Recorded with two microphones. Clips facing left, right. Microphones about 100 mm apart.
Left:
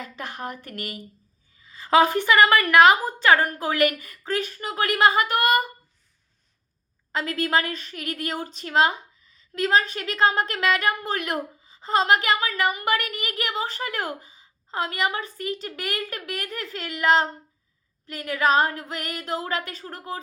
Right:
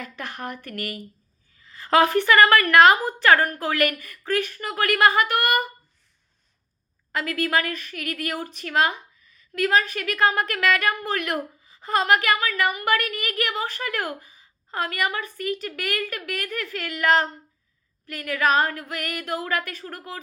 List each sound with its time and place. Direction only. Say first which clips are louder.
0.0 s a woman's voice: even; 20° left (ahead or behind)
7.1 s a woman's voice: even; 25° left (ahead or behind)